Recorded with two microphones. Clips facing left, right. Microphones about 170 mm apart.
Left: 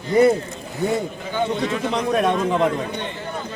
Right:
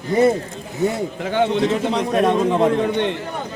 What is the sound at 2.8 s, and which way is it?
Speech, 70° right (ahead or behind).